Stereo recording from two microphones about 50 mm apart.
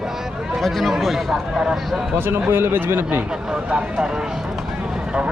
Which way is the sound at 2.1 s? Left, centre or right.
Right.